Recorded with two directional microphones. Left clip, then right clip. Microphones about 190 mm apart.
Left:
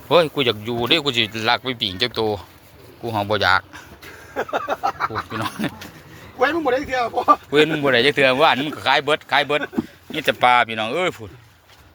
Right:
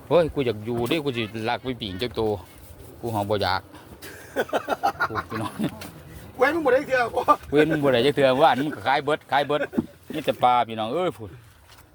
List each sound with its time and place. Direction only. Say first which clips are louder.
0.1 s a man's voice: left 4 dB; centre (ahead or behind)
4.4 s a sound: left 2 dB; 60° right (ahead or behind)
5.4 s speech: left 4 dB; 5° right (ahead or behind)
6.9 s speech: left 3 dB; 25° left (ahead or behind)
7.5 s speech: left 3 dB; 10° right (ahead or behind)